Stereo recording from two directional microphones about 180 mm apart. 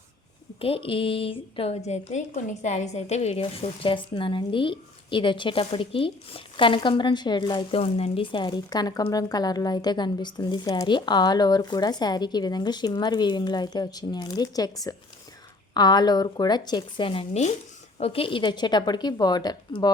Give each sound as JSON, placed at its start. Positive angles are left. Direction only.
{"t": 0.6, "sound": "a woman's voice", "side_deg": 30}